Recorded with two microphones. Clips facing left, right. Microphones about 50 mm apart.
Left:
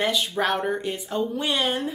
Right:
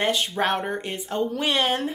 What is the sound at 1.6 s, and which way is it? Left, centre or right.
Speech, right.